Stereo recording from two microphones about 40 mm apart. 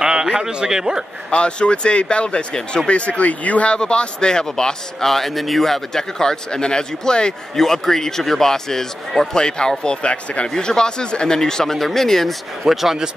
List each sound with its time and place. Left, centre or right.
0.0 s a man's voice: centre
1.3 s a man's voice: left
2.9 s speech: left
3.7 s a man's voice: left
7.5 s speech: centre
9.3 s a man's voice: left
12.7 s speech: centre